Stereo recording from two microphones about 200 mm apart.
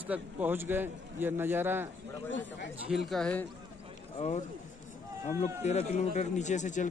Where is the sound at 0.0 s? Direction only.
10° right (ahead or behind).